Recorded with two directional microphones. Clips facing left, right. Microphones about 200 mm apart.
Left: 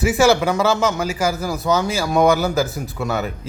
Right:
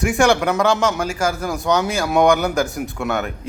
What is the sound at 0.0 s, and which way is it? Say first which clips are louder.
A man's voice: left 1 dB; 5° left (ahead or behind).